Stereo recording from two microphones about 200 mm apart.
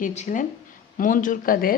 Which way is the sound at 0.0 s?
35° left (ahead or behind).